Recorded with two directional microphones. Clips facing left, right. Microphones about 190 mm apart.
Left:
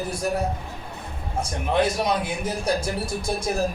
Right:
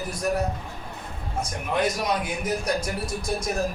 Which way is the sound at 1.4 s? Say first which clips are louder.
Left 3 dB; 30° left (ahead or behind).